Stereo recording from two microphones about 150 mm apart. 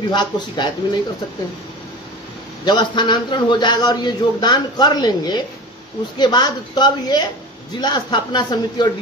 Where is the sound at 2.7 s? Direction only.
30° left (ahead or behind).